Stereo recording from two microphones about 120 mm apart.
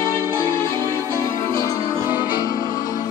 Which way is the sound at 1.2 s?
30° left (ahead or behind).